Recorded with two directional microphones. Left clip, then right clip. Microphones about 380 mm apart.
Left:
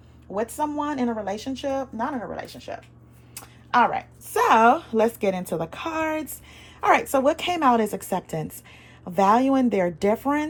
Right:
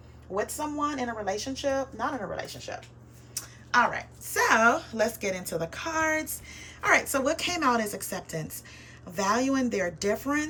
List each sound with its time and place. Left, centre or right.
0.3 s a woman's voice: left